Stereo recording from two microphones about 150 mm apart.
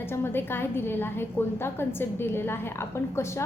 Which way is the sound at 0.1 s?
15° left (ahead or behind).